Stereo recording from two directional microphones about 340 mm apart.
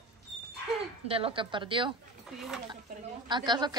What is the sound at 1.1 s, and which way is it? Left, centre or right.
Speech, centre.